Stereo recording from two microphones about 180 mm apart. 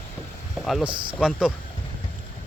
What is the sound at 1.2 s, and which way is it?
Speech, 5° right (ahead or behind).